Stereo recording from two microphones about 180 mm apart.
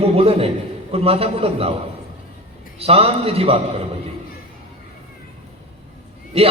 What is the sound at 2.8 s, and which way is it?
Speech, 35° right (ahead or behind).